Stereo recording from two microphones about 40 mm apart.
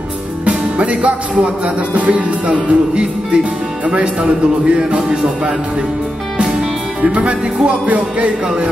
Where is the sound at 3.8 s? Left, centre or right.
Right.